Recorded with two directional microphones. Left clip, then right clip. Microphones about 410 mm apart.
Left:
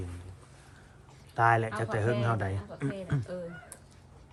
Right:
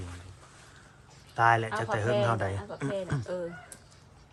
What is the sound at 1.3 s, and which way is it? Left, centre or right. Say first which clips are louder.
Speech: right 1 dB; centre.